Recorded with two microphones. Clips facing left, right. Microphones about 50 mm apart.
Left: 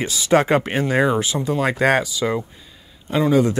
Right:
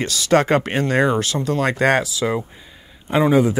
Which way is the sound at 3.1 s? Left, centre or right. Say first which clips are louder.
Right 2 dB; right.